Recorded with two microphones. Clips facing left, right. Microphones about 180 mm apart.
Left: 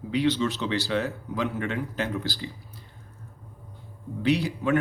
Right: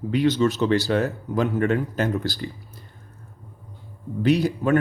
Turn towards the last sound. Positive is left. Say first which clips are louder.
# right 4 dB
turn(degrees=-40)  # may be behind; listen again after turning